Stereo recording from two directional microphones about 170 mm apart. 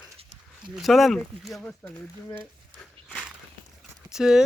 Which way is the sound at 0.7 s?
Centre (ahead or behind).